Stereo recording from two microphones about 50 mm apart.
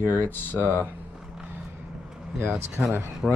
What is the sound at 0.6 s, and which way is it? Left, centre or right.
Speech, right.